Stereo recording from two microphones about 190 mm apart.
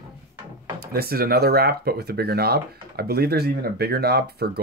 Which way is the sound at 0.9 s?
55° right (ahead or behind).